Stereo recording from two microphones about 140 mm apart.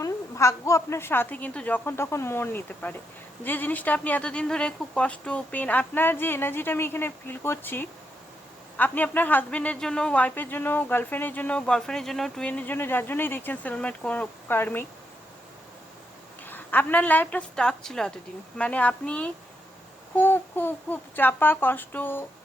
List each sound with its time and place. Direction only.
0.0 s speech: 20° left (ahead or behind)
16.5 s speech: 15° left (ahead or behind)